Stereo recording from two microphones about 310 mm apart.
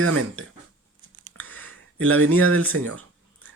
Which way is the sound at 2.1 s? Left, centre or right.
Right.